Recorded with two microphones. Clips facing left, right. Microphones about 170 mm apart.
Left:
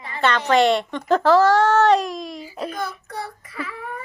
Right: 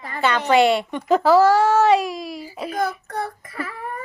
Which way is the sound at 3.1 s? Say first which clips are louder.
Right 4 dB; 55° right (ahead or behind).